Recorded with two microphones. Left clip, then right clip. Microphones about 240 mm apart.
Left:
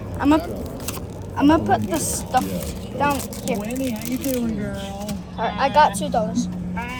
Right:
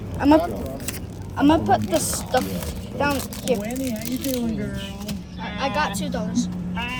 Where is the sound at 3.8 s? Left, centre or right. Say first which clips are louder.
Left 2 dB; centre.